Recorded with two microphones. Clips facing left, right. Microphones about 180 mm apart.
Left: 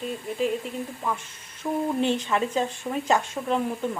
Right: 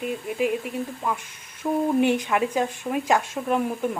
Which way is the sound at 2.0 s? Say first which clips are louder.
Right 3 dB; 15° right (ahead or behind).